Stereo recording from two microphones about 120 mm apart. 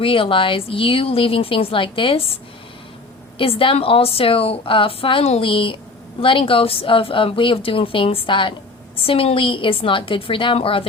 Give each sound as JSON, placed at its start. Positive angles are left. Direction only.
{"t": 0.0, "sound": "a woman's voice", "side_deg": 45}